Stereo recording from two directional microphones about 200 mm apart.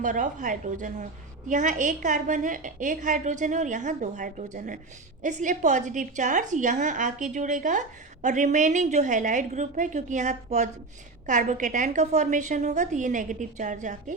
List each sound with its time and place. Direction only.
0.0 s a woman's voice: 40° right (ahead or behind)